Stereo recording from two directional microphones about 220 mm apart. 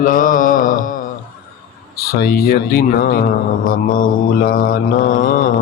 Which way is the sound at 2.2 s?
45° left (ahead or behind).